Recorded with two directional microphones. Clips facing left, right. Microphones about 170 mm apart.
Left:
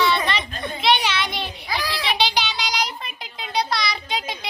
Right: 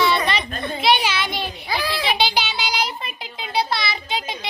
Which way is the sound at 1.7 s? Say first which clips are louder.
Right 3 dB; 30° right (ahead or behind).